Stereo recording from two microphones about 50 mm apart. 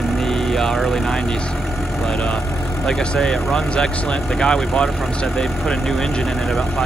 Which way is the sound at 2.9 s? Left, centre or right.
Centre.